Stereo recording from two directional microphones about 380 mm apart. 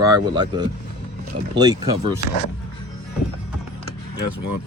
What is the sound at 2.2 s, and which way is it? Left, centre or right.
Speech, left.